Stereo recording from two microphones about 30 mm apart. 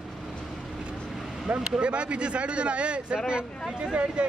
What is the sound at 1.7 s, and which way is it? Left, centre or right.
Speech, right.